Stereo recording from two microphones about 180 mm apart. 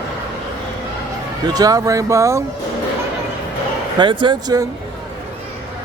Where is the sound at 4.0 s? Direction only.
25° right (ahead or behind).